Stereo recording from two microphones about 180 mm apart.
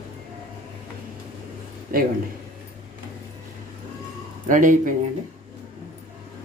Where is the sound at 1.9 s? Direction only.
50° right (ahead or behind).